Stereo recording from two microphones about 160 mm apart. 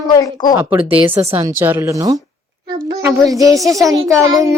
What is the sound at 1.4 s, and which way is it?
Child singing, 15° right (ahead or behind).